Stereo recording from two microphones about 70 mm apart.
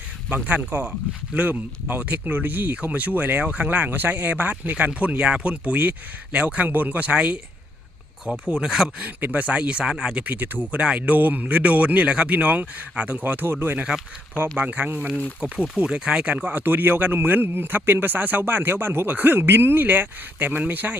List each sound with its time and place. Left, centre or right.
0.3 s a man's voice: centre
8.4 s speech: centre
9.0 s speech: right
10.2 s a man's voice: right
14.6 s a man's voice: right
15.4 s a man's voice: centre